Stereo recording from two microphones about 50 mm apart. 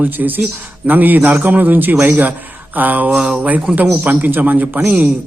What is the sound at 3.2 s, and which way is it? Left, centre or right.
Speech, centre.